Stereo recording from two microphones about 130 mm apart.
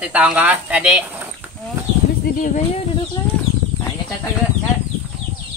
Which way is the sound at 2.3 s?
85° left.